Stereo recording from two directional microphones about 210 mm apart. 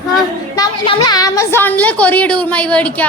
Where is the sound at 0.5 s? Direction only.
20° left (ahead or behind).